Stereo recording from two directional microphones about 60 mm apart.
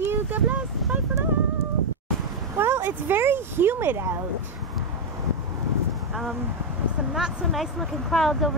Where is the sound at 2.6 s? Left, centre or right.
Right.